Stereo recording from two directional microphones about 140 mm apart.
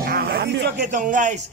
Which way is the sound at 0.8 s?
65° right (ahead or behind).